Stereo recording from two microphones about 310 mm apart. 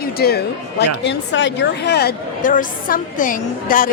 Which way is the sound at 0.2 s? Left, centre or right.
Left.